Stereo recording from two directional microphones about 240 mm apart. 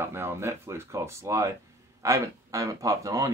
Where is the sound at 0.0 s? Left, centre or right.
Centre.